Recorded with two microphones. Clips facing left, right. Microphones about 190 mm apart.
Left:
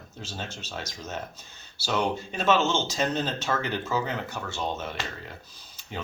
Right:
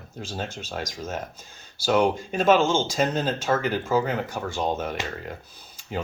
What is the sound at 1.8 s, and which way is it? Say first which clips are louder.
Speech: right 6 dB; 50° right (ahead or behind).